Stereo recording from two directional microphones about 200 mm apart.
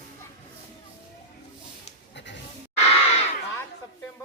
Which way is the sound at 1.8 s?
60° left (ahead or behind).